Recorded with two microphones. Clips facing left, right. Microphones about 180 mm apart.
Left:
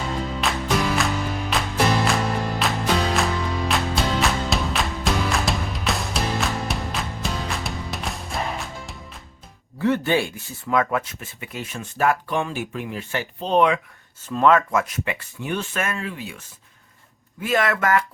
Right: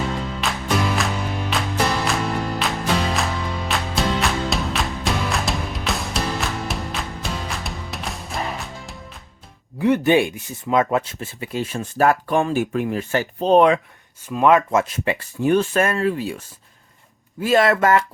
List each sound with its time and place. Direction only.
0.4 s music: centre (ahead or behind)
9.7 s speech: 15° right (ahead or behind); by 13.7 s 40° right (ahead or behind)
14.3 s speech: 15° right (ahead or behind); by 16.4 s 40° right (ahead or behind)
17.4 s speech: 30° right (ahead or behind)